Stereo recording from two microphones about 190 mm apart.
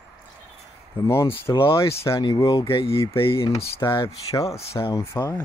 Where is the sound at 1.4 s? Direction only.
30° left (ahead or behind).